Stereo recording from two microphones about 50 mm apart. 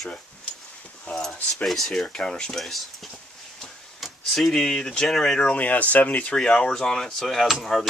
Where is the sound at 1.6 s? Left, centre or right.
Centre.